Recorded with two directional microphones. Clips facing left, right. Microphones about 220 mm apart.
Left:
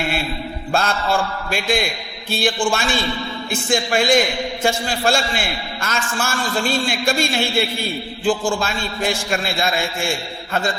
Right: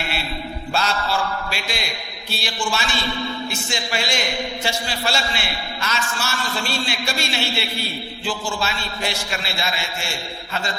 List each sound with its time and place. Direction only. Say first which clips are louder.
0.7 s a man's voice: left 4 dB; 50° left (ahead or behind)